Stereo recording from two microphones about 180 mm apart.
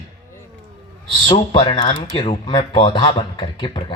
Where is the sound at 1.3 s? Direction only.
30° left (ahead or behind).